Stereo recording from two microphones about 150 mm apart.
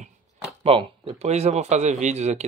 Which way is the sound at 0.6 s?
40° right (ahead or behind).